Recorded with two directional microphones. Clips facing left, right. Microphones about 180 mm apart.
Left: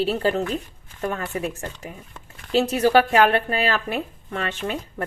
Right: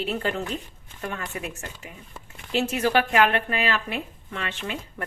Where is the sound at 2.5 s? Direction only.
35° left (ahead or behind).